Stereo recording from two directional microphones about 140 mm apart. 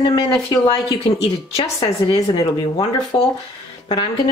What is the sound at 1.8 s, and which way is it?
Speech, 45° left (ahead or behind).